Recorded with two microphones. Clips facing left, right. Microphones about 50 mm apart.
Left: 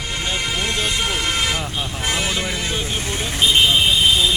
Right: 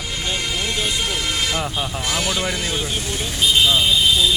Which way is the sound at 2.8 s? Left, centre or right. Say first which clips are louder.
Left 1 dB; left.